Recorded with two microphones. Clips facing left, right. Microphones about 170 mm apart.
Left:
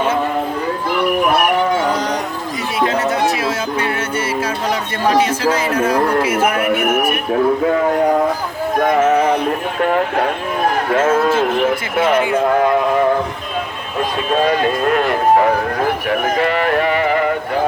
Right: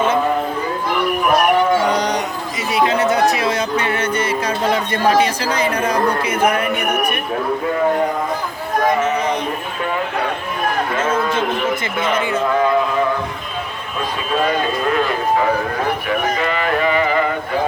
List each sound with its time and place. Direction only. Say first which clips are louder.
2.7 s music: right 2 dB; centre (ahead or behind)
8.9 s music: left 6 dB; 50° left (ahead or behind)
10.9 s speech: left 8 dB; 50° left (ahead or behind)
12.5 s speech: even; 55° left (ahead or behind)
14.9 s speech: left 5 dB; 55° left (ahead or behind)